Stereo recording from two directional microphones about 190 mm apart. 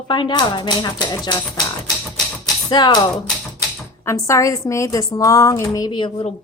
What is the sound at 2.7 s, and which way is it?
A woman's voice, 20° left (ahead or behind).